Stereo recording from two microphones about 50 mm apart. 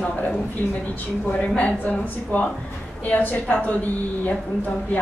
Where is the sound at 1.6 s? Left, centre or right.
Left.